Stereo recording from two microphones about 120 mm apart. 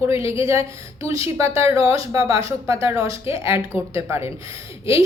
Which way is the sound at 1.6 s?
25° right (ahead or behind).